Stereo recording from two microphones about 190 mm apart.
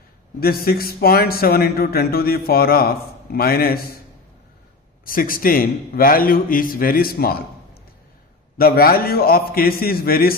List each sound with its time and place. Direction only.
0.4 s speech: 50° left (ahead or behind)
5.0 s speech: 50° left (ahead or behind)
8.5 s speech: 50° left (ahead or behind)